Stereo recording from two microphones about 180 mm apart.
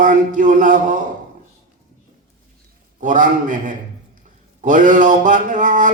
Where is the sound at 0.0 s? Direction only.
45° right (ahead or behind).